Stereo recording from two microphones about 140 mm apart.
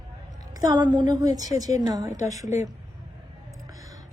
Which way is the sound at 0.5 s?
30° right (ahead or behind).